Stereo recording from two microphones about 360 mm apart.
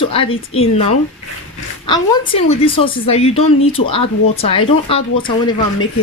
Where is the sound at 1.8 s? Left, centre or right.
Centre.